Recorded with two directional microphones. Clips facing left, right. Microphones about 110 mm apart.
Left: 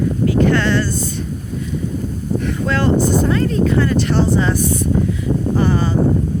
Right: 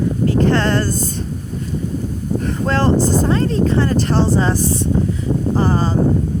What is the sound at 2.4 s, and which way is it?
Speech, 35° right (ahead or behind).